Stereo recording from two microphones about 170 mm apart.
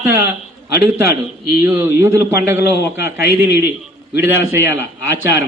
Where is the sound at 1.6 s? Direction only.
10° right (ahead or behind).